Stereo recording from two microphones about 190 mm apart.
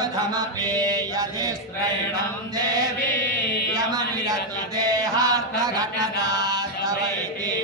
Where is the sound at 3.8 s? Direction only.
20° right (ahead or behind).